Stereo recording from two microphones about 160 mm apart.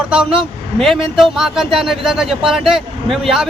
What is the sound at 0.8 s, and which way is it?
Speech, centre (ahead or behind).